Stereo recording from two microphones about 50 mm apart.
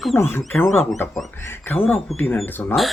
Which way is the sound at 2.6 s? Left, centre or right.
Left.